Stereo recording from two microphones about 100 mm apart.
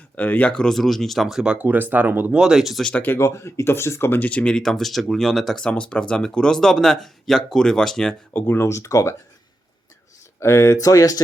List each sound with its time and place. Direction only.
0.2 s speech: 15° left (ahead or behind); by 1.5 s 5° right (ahead or behind)
1.5 s speech: 20° right (ahead or behind)
2.4 s speech: 5° right (ahead or behind)
2.9 s speech: 20° left (ahead or behind)
8.3 s speech: 20° left (ahead or behind)
10.4 s speech: 30° left (ahead or behind)